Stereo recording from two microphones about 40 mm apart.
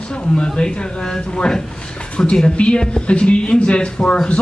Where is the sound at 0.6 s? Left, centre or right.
Centre.